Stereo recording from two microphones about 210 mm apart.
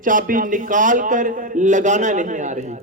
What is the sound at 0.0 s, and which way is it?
A man's voice, 40° right (ahead or behind).